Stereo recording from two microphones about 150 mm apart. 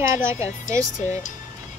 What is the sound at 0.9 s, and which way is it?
Speech, 55° left (ahead or behind).